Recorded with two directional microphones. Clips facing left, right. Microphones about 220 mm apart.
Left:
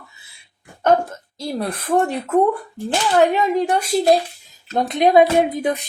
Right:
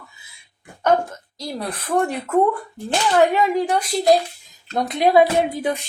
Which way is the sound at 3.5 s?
25° left (ahead or behind).